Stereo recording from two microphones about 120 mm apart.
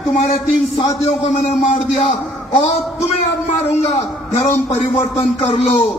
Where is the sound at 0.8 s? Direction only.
60° left (ahead or behind).